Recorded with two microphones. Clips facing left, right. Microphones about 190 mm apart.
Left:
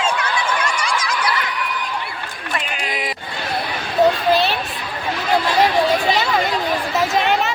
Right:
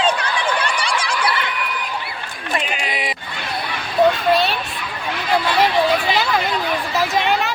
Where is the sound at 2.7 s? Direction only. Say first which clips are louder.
Even; centre (ahead or behind).